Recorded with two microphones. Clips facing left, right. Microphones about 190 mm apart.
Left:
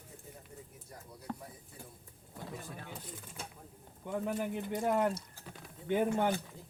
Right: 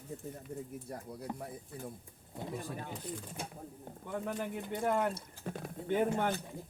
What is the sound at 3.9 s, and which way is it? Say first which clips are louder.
Bird: right 10 dB; 60° right (ahead or behind).